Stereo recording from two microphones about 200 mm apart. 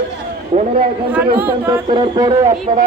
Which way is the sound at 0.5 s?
30° right (ahead or behind).